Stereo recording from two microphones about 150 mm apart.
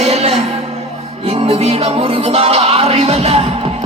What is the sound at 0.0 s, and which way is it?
Music, 45° right (ahead or behind).